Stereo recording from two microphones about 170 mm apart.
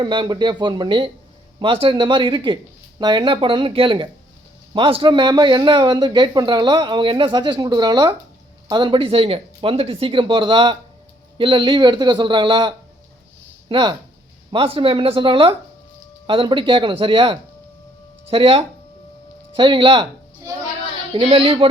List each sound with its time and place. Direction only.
0.0 s a man's voice: 25° right (ahead or behind)
21.1 s speech: 35° right (ahead or behind)